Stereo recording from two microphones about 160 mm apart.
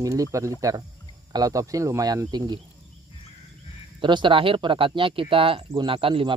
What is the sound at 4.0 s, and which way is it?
Speech, 30° right (ahead or behind).